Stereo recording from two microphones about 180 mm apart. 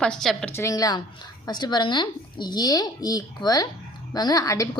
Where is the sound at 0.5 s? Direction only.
15° left (ahead or behind).